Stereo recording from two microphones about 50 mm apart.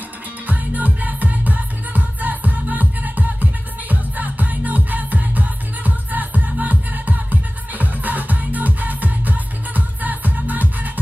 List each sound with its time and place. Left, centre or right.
0.5 s music: right